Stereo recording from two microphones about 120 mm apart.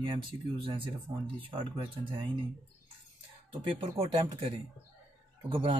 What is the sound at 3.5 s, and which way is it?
Speech, 45° right (ahead or behind).